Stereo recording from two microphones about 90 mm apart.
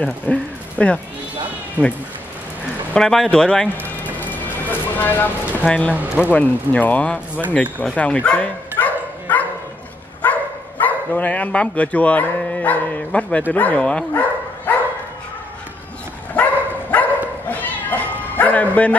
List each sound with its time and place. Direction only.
0.0 s speech: 15° left (ahead or behind)
1.8 s speech: 15° right (ahead or behind)
2.9 s speech: 5° left (ahead or behind)
4.0 s a sound: 20° left (ahead or behind)
5.7 s speech: 15° left (ahead or behind)
5.9 s speech: 15° right (ahead or behind)
6.3 s speech: 15° left (ahead or behind)
7.8 s bow-wow: 10° left (ahead or behind)
10.8 s speech: 20° left (ahead or behind)
16.4 s dog: 15° left (ahead or behind)
17.5 s cat: 20° left (ahead or behind)